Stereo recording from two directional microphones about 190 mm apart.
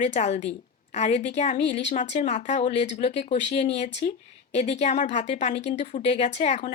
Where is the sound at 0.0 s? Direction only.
40° left (ahead or behind).